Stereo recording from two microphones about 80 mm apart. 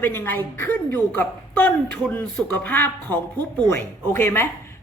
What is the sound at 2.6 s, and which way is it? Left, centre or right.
A woman's voice, left.